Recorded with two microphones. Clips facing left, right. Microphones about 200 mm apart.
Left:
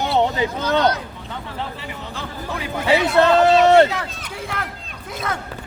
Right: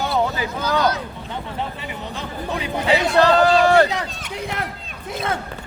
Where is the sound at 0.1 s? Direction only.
25° left (ahead or behind).